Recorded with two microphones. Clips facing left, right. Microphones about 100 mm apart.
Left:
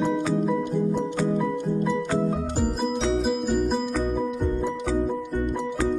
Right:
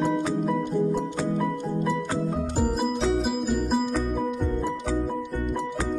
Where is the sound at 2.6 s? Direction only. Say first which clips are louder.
Right 2 dB; centre (ahead or behind).